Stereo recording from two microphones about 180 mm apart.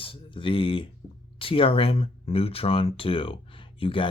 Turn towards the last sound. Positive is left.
turn(degrees=30)  # may be behind; listen again after turning